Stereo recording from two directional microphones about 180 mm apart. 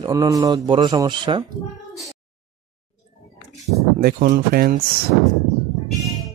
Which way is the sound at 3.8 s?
55° right (ahead or behind).